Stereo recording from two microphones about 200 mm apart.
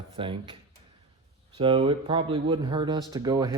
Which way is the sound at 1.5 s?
25° right (ahead or behind).